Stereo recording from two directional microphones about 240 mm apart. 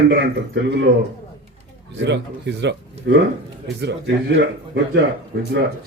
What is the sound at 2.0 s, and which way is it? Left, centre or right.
Speech, right.